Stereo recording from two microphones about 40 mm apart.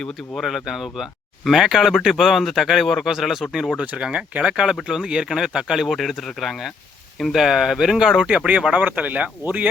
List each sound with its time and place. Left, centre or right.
0.3 s speech: centre
3.8 s speech: right
5.9 s speech: centre
8.3 s speech: right